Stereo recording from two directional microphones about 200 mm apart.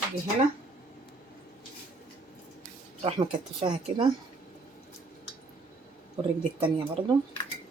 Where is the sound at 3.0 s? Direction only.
25° right (ahead or behind).